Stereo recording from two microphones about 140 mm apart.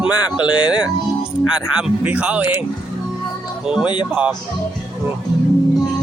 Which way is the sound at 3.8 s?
35° left (ahead or behind).